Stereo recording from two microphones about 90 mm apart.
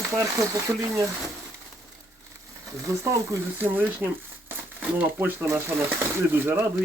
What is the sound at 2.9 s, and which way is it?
Speech, 40° right (ahead or behind).